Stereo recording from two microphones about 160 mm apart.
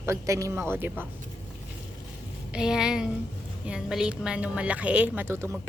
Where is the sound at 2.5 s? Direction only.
5° right (ahead or behind).